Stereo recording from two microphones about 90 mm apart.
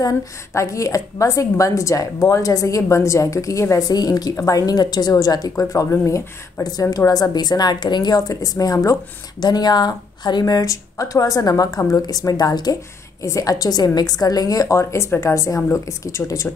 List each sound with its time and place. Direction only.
0.5 s speech: 35° left (ahead or behind)
9.4 s speech: 50° left (ahead or behind)
13.2 s speech: 35° left (ahead or behind)